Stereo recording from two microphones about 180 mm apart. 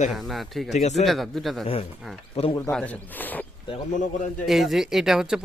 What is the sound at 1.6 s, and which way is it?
Speech, 30° left (ahead or behind).